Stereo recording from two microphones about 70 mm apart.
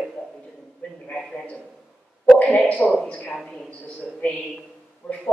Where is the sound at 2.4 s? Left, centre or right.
Centre.